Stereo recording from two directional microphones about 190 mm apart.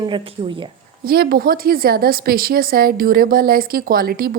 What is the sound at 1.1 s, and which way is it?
A woman's voice, 55° right (ahead or behind).